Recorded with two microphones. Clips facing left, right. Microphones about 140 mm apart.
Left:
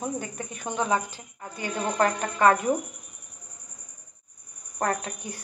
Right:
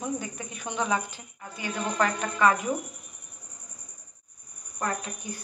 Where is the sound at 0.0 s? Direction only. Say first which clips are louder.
Left 1 dB; 45° left (ahead or behind).